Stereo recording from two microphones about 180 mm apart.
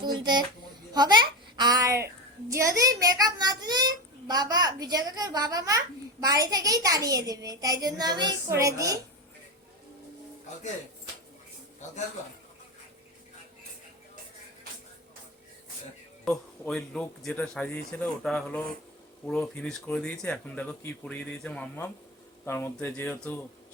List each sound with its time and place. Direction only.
0.0 s a child's voice: 25° right (ahead or behind)
16.2 s speech: 5° left (ahead or behind)